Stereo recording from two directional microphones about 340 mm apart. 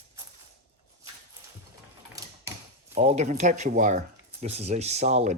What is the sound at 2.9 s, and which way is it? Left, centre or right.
Speech, centre.